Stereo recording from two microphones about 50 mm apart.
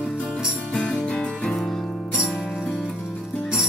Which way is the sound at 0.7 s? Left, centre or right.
Centre.